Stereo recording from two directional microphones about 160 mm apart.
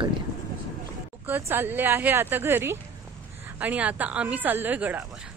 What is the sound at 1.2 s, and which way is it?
Speech, 10° right (ahead or behind).